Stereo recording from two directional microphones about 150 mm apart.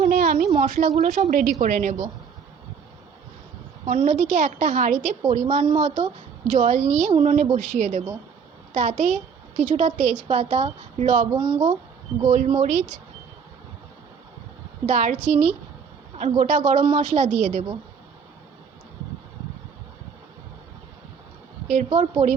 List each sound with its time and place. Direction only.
0.0 s a woman's voice: 60° right (ahead or behind)
3.8 s a woman's voice: 55° right (ahead or behind)
7.5 s a woman's voice: 55° right (ahead or behind)
11.3 s speech: 30° right (ahead or behind)
12.3 s a woman's voice: 50° right (ahead or behind)
14.8 s a woman's voice: 55° right (ahead or behind)
21.7 s a woman's voice: 50° right (ahead or behind)